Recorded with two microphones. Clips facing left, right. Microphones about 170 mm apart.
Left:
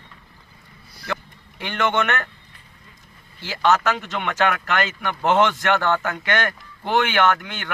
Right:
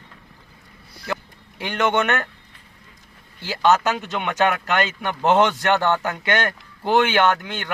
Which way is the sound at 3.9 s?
20° right (ahead or behind).